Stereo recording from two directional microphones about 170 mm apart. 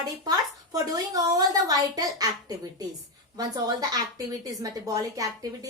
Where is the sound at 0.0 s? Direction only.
25° right (ahead or behind).